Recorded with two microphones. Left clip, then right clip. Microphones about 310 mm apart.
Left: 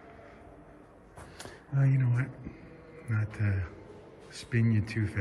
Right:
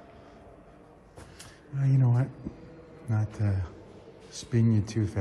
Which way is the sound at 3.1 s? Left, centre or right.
Centre.